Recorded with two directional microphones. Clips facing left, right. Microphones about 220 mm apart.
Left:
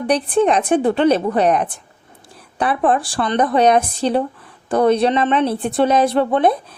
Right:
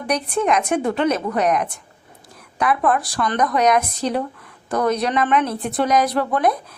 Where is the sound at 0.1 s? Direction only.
30° left (ahead or behind).